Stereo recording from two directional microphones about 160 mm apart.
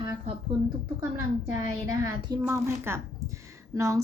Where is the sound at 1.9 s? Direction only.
25° right (ahead or behind).